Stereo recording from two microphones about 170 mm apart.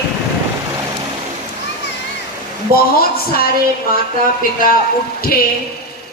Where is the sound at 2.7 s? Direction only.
60° left (ahead or behind).